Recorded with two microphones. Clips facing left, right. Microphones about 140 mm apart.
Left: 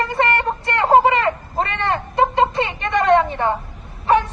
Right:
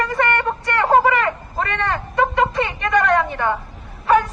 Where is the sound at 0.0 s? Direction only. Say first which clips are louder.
Even; 30° left (ahead or behind).